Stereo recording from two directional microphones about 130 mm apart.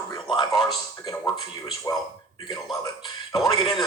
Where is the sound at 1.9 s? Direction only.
25° left (ahead or behind).